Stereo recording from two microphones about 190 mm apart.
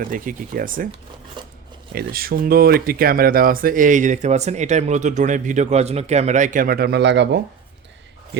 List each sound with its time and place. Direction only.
0.0 s speech: 45° right (ahead or behind)
1.4 s a sound: 25° right (ahead or behind)
1.9 s speech: 50° right (ahead or behind)